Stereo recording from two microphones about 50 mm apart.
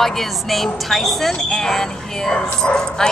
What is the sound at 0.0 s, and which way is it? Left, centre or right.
Speech, centre.